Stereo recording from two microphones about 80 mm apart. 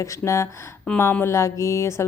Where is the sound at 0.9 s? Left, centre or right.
Centre.